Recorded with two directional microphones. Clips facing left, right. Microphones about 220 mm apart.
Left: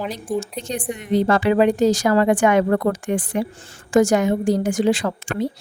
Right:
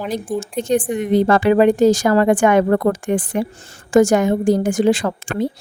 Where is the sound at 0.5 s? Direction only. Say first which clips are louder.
Right 9 dB; 50° right (ahead or behind).